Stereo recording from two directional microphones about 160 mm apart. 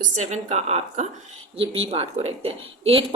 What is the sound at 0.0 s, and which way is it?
Speech, 45° right (ahead or behind).